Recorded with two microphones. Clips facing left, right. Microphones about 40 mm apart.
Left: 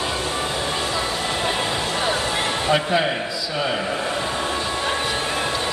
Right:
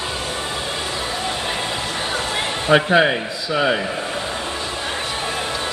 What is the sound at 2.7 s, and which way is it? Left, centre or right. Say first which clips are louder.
Speech: right 7 dB; right.